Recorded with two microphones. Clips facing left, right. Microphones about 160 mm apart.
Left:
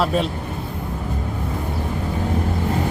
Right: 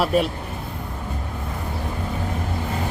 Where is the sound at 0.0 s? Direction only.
10° right (ahead or behind).